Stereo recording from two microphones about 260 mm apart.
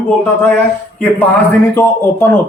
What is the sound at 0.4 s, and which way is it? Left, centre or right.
Speech, centre.